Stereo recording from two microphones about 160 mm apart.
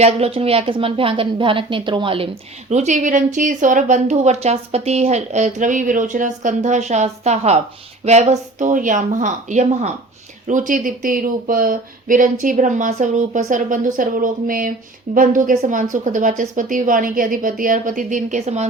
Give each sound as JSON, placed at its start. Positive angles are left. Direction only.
{"t": 0.0, "sound": "a woman's voice", "side_deg": -40}